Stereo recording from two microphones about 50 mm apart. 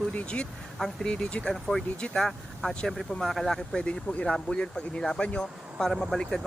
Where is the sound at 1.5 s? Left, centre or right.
Centre.